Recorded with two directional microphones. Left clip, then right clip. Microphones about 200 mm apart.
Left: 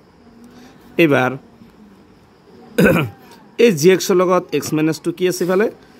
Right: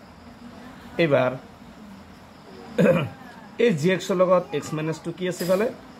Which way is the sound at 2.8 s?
60° left (ahead or behind).